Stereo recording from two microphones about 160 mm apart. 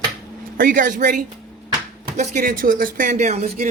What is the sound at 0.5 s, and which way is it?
Speech, 60° right (ahead or behind).